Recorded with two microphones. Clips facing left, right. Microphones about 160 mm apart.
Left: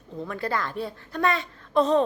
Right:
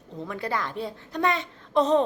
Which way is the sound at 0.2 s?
15° right (ahead or behind).